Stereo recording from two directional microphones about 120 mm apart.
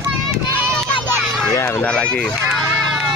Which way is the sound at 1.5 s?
25° left (ahead or behind).